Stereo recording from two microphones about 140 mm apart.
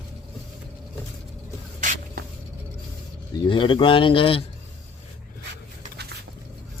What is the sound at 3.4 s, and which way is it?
Speech, 35° left (ahead or behind).